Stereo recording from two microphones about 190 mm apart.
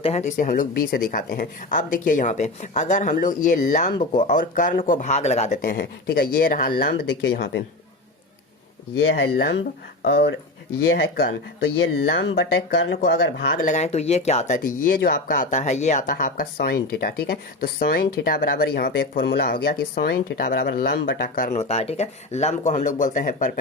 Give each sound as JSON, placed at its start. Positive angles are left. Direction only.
{"t": 0.0, "sound": "speech", "side_deg": 35}
{"t": 9.0, "sound": "speech", "side_deg": 60}
{"t": 13.0, "sound": "speech", "side_deg": 55}